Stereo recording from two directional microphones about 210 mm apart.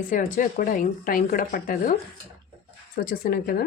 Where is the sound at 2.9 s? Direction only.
40° left (ahead or behind).